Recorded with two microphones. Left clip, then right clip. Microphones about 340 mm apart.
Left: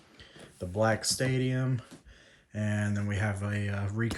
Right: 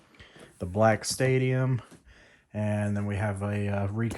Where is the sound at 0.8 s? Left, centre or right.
Centre.